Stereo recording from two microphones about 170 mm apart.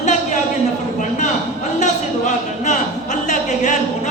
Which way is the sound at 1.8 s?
45° left (ahead or behind).